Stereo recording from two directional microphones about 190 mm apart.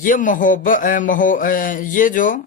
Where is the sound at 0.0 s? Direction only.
45° left (ahead or behind).